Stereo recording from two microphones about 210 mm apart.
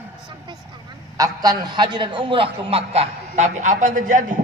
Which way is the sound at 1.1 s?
15° right (ahead or behind).